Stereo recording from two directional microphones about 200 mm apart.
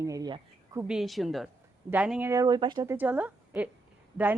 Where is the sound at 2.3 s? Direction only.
20° right (ahead or behind).